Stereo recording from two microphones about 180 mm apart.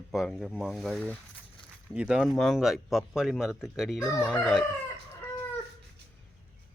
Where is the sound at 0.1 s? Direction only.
Centre (ahead or behind).